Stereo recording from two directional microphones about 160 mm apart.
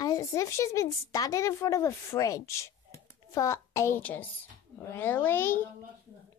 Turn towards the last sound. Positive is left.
turn(degrees=15)  # may be behind; listen again after turning